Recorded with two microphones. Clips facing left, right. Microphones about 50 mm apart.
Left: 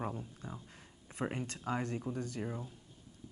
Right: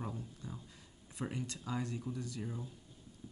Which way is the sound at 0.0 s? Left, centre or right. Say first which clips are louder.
Left 3 dB; left.